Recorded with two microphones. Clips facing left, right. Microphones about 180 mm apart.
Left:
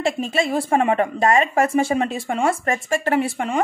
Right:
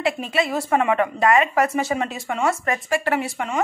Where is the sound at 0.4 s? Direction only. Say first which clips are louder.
Left 1 dB; 30° left (ahead or behind).